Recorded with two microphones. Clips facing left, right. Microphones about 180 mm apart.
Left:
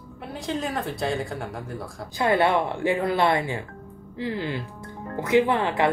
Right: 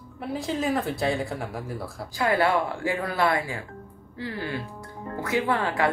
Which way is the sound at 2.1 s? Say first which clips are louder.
Left 2 dB; 25° left (ahead or behind).